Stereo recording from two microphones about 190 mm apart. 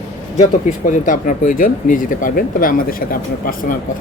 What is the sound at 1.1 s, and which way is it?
Speech, 45° left (ahead or behind).